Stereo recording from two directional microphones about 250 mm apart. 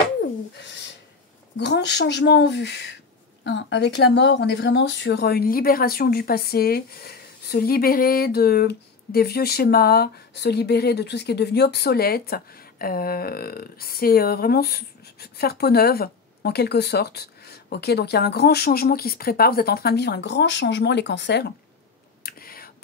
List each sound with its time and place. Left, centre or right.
1.6 s speech: left
22.2 s whispering: left